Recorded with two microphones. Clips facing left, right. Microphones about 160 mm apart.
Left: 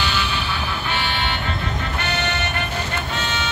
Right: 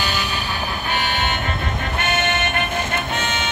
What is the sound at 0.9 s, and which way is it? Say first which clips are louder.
Music: right 2 dB; 45° right (ahead or behind).